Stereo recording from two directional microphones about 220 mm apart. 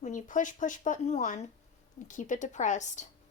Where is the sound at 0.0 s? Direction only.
35° left (ahead or behind).